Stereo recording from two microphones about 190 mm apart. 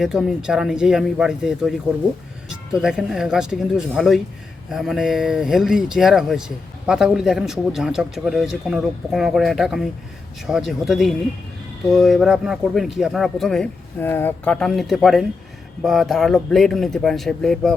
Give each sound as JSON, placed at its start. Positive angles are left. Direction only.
{"t": 0.0, "sound": "speech", "side_deg": 0}
{"t": 2.7, "sound": "speech", "side_deg": -5}